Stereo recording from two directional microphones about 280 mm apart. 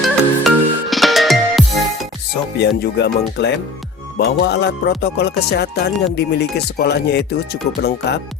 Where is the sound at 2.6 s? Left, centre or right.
Left.